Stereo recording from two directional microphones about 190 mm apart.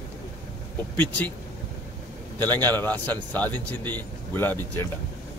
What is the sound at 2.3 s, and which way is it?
A man's voice, 10° left (ahead or behind).